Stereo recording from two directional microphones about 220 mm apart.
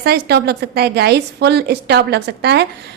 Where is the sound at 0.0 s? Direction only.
50° right (ahead or behind).